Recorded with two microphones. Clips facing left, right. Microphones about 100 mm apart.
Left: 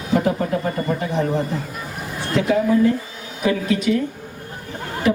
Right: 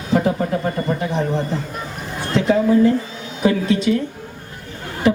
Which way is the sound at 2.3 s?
30° right (ahead or behind).